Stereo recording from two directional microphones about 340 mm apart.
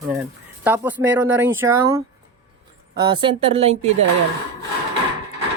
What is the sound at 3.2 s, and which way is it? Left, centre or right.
Speech, centre.